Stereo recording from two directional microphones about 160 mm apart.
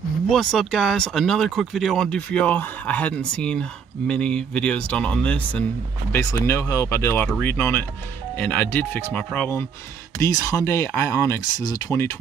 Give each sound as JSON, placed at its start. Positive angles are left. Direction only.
{"t": 0.3, "sound": "speech", "side_deg": 0}